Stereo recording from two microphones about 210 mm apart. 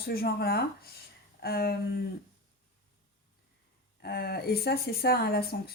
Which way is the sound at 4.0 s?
50° left (ahead or behind).